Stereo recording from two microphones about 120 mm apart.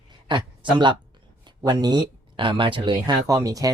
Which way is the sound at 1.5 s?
35° right (ahead or behind).